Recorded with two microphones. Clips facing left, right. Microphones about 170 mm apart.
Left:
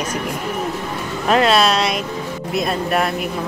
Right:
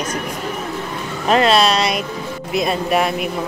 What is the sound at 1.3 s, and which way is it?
Speech, centre (ahead or behind).